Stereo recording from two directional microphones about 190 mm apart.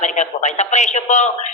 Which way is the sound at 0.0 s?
40° left (ahead or behind).